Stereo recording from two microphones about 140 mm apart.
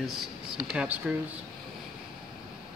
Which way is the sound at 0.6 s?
10° right (ahead or behind).